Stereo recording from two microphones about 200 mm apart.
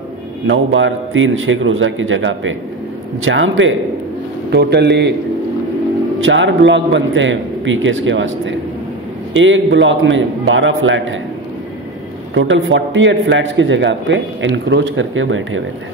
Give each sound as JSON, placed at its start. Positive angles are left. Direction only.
{"t": 0.5, "sound": "a man's voice", "side_deg": -75}
{"t": 4.5, "sound": "a man's voice", "side_deg": -55}
{"t": 6.2, "sound": "a man's voice", "side_deg": -70}
{"t": 12.4, "sound": "a man's voice", "side_deg": -75}